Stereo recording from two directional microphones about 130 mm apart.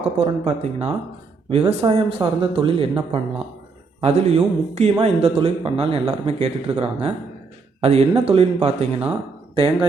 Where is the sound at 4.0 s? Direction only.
55° right (ahead or behind).